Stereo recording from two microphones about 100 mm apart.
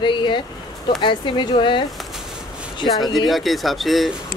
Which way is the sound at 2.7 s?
45° left (ahead or behind).